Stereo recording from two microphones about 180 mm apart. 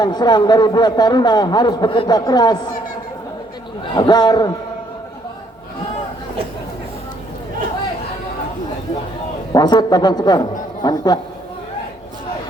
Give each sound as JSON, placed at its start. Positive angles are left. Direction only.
{"t": 0.0, "sound": "a man's voice", "side_deg": 25}
{"t": 3.9, "sound": "a man's voice", "side_deg": 25}
{"t": 9.5, "sound": "a man's voice", "side_deg": 25}